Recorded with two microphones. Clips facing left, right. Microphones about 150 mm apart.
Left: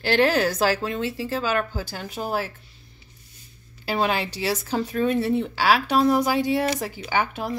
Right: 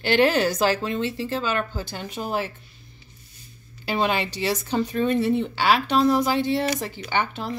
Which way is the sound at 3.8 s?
Centre (ahead or behind).